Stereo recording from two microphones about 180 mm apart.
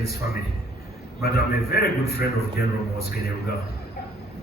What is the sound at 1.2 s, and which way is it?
A man's voice, 60° left (ahead or behind).